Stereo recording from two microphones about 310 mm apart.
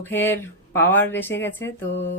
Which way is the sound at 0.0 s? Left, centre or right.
Centre.